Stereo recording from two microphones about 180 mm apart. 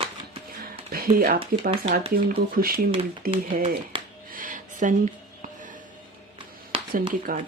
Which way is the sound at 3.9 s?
30° right (ahead or behind).